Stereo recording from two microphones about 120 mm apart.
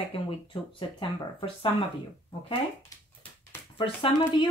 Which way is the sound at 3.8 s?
45° left (ahead or behind).